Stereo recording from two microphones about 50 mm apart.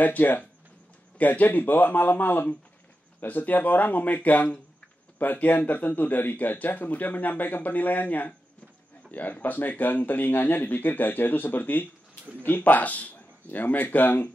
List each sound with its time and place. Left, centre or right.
0.0 s speech: left